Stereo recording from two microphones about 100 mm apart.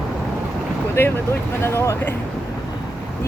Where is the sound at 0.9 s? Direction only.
20° left (ahead or behind).